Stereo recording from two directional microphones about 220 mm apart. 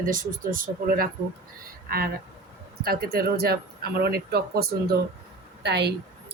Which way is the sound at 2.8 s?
45° right (ahead or behind).